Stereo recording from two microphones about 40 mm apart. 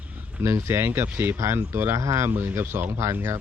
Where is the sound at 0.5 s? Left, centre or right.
Right.